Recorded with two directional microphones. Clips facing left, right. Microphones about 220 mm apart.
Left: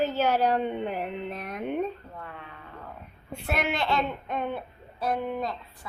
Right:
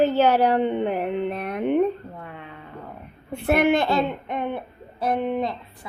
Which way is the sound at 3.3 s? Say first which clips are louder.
Right 10 dB; 55° right (ahead or behind).